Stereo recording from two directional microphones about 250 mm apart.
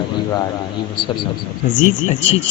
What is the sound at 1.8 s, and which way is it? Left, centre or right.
Speech, left.